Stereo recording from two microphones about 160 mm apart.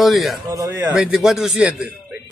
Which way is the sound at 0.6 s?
15° right (ahead or behind).